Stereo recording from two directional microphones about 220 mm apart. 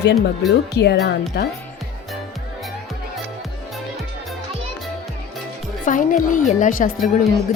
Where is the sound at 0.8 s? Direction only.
50° left (ahead or behind).